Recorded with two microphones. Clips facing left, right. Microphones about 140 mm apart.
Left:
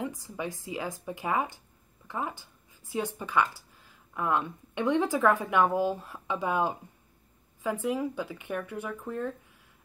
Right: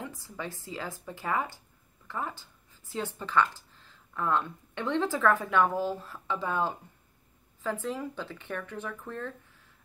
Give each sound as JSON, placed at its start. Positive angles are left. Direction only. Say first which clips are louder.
{"t": 0.0, "sound": "speech", "louder": "left 4 dB", "side_deg": 15}